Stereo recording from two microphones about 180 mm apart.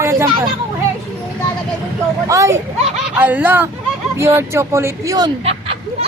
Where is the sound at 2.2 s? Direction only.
15° right (ahead or behind).